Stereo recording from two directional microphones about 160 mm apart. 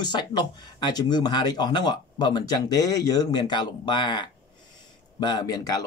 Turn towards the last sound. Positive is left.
turn(degrees=20)  # may be behind; listen again after turning